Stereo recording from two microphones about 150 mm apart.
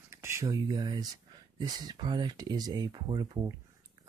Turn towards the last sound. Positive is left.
turn(degrees=-25)  # may be behind; listen again after turning